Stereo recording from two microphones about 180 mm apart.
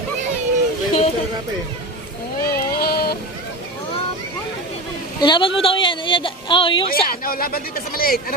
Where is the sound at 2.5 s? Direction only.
60° left (ahead or behind).